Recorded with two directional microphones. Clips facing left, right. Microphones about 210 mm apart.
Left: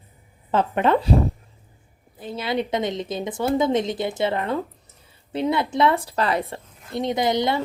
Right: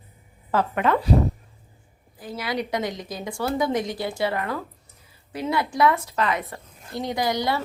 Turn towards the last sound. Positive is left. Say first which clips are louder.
# left 3 dB
turn(degrees=20)  # may be behind; listen again after turning